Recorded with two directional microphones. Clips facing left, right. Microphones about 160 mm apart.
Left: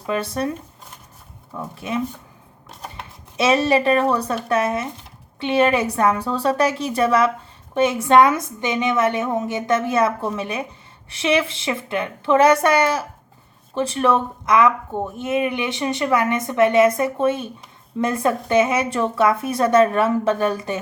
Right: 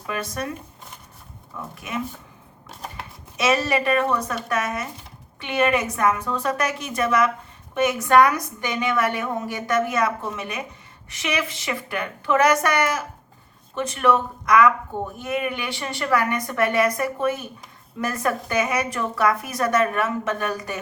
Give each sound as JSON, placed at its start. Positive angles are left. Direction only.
{"t": 0.1, "sound": "speech", "side_deg": 30}
{"t": 1.7, "sound": "speech", "side_deg": 30}
{"t": 2.6, "sound": "typewriter", "side_deg": 0}
{"t": 3.3, "sound": "a woman's voice", "side_deg": 30}